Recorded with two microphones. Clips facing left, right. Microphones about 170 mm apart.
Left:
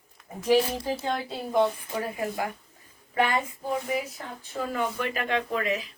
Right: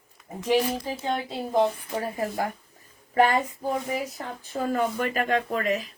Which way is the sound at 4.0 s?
40° right (ahead or behind).